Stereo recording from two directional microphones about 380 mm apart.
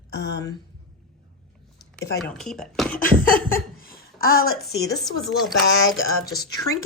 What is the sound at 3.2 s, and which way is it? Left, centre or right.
Speech, left.